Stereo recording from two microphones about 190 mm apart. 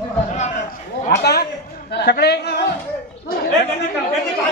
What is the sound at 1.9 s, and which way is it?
Speech, 60° left (ahead or behind).